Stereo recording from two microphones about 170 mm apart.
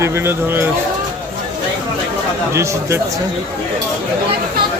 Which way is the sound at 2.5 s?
15° right (ahead or behind).